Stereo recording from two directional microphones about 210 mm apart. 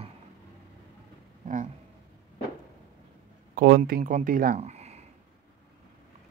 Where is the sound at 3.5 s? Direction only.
45° right (ahead or behind).